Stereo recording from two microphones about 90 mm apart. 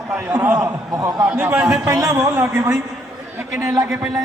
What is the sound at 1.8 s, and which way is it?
A man's voice, 35° right (ahead or behind).